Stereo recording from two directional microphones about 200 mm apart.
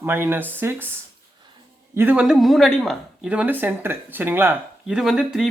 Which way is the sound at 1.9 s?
10° right (ahead or behind).